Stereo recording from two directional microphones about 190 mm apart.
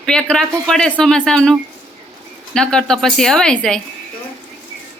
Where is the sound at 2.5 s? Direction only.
5° left (ahead or behind).